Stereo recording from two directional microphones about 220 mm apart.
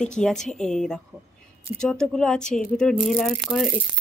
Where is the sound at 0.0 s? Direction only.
5° left (ahead or behind).